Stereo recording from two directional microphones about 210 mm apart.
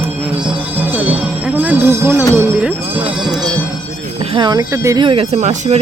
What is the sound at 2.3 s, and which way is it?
Music, 10° right (ahead or behind).